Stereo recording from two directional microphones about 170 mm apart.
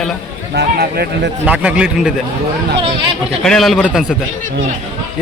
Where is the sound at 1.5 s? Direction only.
5° right (ahead or behind).